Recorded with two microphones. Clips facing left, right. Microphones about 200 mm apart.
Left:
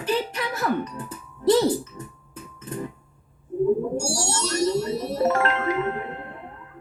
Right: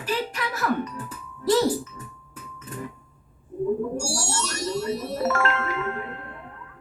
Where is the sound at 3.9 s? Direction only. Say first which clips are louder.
Left 2 dB; 25° left (ahead or behind).